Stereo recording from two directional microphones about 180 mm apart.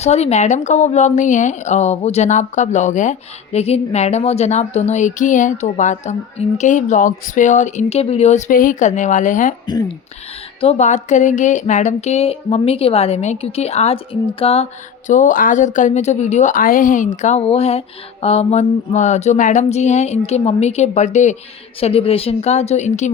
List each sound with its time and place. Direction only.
0.0 s speech: 35° left (ahead or behind)
10.6 s speech: 35° left (ahead or behind)